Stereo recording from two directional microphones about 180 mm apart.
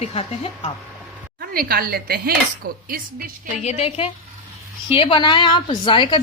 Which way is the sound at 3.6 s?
35° left (ahead or behind).